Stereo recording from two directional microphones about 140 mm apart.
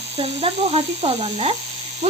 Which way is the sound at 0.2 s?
40° right (ahead or behind).